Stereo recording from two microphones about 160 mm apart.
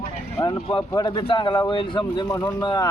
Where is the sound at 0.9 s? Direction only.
25° left (ahead or behind).